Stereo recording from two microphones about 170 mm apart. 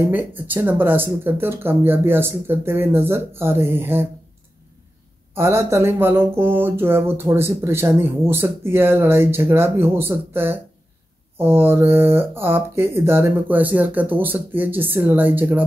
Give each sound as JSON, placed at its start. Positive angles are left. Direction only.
{"t": 0.1, "sound": "speech", "side_deg": -10}
{"t": 5.3, "sound": "speech", "side_deg": -15}